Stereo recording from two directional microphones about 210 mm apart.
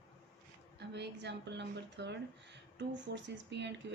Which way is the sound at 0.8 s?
55° right (ahead or behind).